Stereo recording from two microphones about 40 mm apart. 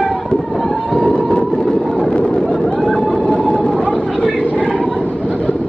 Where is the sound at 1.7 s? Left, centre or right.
Centre.